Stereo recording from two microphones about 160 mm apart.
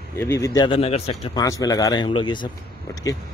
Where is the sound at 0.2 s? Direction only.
15° left (ahead or behind).